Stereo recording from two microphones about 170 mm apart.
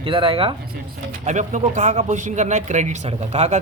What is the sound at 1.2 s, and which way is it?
Speech, 45° right (ahead or behind).